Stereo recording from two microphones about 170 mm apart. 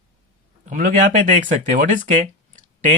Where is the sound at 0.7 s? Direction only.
50° right (ahead or behind).